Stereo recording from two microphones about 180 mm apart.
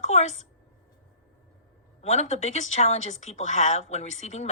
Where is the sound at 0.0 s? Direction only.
40° left (ahead or behind).